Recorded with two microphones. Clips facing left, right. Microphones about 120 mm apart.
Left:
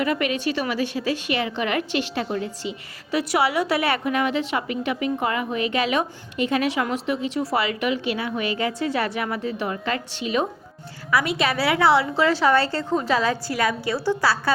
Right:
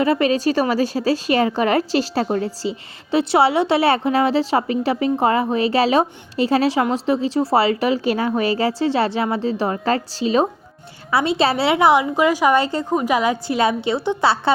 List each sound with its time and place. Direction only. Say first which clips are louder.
0.0 s a woman's voice: right 6 dB; 30° right (ahead or behind)